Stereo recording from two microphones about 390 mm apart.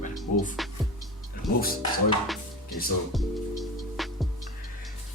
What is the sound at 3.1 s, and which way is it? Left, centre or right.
Music, centre.